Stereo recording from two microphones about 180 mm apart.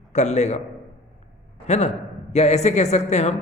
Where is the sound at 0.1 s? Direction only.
40° left (ahead or behind).